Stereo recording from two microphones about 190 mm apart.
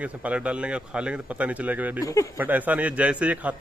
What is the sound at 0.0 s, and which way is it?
A man's voice, 5° right (ahead or behind).